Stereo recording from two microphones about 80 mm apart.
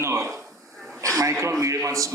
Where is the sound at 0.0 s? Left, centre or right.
Right.